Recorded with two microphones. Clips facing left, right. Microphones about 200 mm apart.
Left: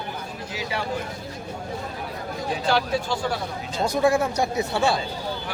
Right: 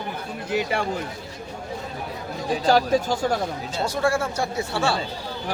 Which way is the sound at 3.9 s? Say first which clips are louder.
Left 4 dB; 15° left (ahead or behind).